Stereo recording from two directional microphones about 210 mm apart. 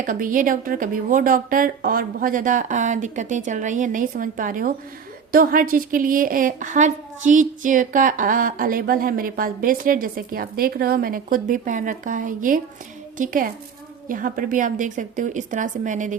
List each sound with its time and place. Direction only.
0.0 s a woman's voice: 40° right (ahead or behind)